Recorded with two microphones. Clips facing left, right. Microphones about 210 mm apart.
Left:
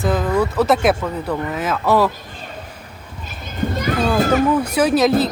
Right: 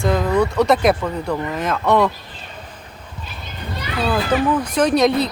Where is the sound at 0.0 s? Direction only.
5° left (ahead or behind).